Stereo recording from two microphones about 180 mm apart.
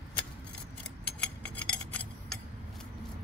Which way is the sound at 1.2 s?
5° left (ahead or behind).